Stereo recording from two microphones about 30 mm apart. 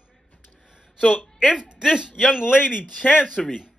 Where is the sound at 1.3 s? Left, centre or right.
Right.